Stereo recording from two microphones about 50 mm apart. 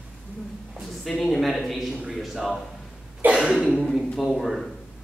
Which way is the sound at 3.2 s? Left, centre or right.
Right.